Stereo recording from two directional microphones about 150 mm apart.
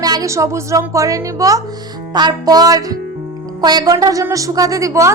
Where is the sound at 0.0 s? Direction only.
25° right (ahead or behind).